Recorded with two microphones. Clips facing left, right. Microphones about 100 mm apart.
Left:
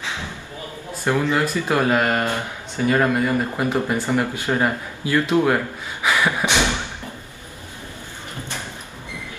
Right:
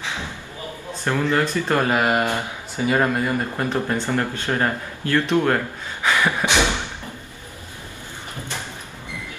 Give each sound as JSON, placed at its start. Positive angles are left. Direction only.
{"t": 1.0, "sound": "speech", "side_deg": 15}
{"t": 1.9, "sound": "speech", "side_deg": -10}
{"t": 6.0, "sound": "a sound", "side_deg": 15}